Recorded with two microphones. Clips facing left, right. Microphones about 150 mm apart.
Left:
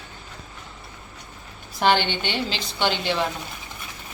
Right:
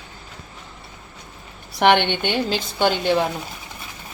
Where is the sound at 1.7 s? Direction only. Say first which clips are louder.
Right 4 dB; 65° right (ahead or behind); by 3.1 s 45° right (ahead or behind).